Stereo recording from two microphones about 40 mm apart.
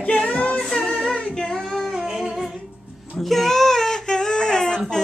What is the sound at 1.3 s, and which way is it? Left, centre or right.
Child singing, centre.